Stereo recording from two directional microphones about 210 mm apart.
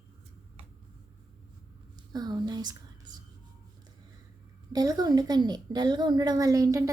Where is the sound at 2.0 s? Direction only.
20° right (ahead or behind).